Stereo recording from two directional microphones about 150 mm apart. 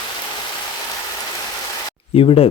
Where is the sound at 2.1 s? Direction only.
40° left (ahead or behind).